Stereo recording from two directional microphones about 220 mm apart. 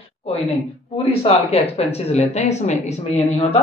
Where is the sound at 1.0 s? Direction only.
25° left (ahead or behind).